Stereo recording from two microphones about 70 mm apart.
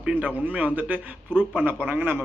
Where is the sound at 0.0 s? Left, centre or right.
Right.